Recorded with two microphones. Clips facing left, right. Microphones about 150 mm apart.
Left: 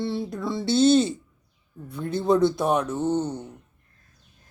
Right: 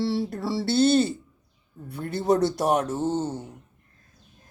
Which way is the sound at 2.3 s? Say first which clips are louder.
Left 1 dB; 75° right (ahead or behind).